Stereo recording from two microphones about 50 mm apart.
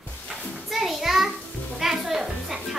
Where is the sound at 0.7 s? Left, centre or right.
Centre.